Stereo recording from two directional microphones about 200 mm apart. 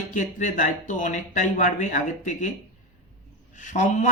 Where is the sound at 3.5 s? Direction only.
40° left (ahead or behind).